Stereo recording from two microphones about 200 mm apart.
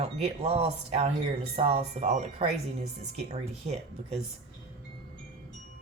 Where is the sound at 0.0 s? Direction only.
30° right (ahead or behind).